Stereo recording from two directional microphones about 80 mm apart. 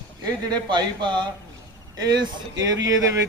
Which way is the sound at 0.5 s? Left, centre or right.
Right.